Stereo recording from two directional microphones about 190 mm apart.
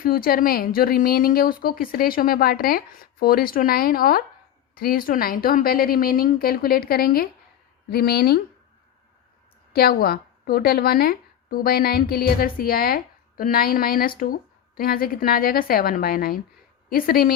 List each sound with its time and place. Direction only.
0.0 s a woman's voice: 50° left (ahead or behind)
9.7 s a woman's voice: 55° left (ahead or behind)